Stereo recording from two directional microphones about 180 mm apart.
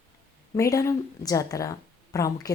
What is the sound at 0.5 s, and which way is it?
A woman's voice, 15° left (ahead or behind).